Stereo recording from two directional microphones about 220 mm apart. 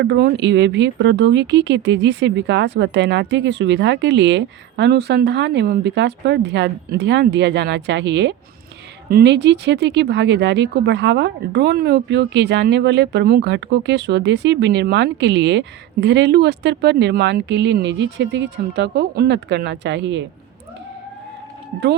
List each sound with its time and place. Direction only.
0.0 s speech: 50° right (ahead or behind)